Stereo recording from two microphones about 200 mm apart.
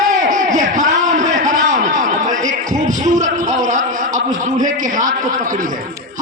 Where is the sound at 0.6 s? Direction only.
40° right (ahead or behind).